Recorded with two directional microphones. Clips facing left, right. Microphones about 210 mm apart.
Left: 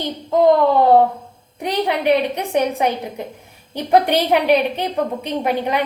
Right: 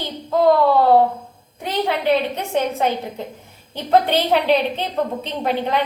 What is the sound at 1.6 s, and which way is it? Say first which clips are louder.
A woman's voice: left 2 dB; 15° left (ahead or behind).